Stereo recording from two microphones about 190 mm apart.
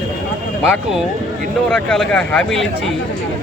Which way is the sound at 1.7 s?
5° left (ahead or behind).